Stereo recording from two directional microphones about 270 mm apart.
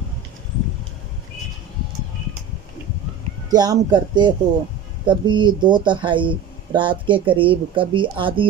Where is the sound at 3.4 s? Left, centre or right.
Centre.